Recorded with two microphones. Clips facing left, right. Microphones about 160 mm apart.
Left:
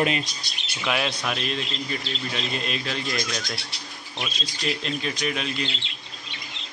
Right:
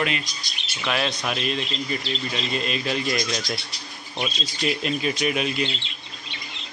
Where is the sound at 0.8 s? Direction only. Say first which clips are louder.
Right 1 dB; 5° left (ahead or behind).